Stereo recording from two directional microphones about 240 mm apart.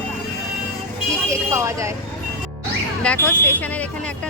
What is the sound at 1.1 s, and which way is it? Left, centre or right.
Speech, centre.